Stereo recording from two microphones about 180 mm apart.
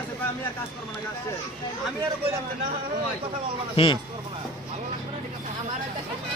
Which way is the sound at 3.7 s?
30° left (ahead or behind).